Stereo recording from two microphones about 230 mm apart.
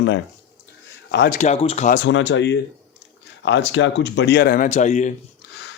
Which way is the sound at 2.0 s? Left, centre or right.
Left.